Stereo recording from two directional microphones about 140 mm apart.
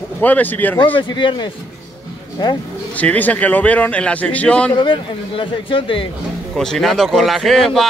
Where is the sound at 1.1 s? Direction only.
35° left (ahead or behind).